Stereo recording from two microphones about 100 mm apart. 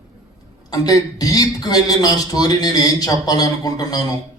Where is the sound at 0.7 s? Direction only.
40° left (ahead or behind).